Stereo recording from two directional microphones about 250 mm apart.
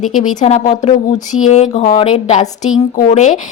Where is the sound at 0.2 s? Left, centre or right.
Left.